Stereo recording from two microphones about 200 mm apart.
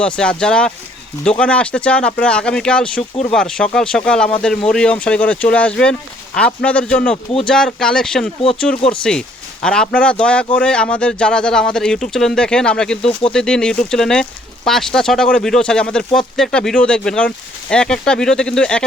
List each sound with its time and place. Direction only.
0.0 s speech: 5° left (ahead or behind)
8.8 s speech: 25° left (ahead or behind)
9.6 s speech: 5° left (ahead or behind)